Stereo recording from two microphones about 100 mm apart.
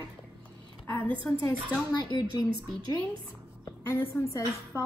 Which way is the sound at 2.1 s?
45° left (ahead or behind).